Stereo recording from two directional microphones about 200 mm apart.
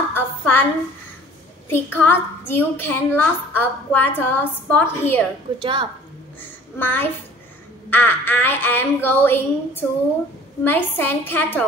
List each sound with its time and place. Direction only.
0.1 s a sound: 10° left (ahead or behind)
1.7 s a woman's voice: 10° left (ahead or behind)
5.6 s a woman's voice: 25° right (ahead or behind)
6.4 s a child's voice: 10° left (ahead or behind)